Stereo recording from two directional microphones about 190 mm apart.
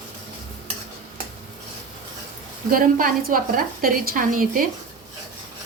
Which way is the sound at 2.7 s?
50° right (ahead or behind).